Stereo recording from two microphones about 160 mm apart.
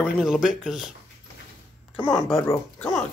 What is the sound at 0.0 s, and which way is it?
Speech, centre (ahead or behind).